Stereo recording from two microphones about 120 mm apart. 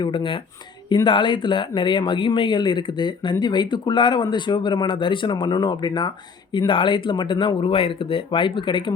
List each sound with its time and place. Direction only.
0.0 s speech: 45° left (ahead or behind)